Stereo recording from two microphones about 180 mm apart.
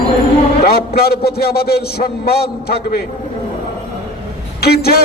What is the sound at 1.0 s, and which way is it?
A man's voice, 60° left (ahead or behind).